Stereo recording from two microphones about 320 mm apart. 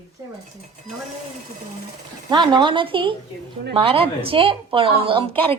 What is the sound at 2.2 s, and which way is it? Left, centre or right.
A woman's voice, centre.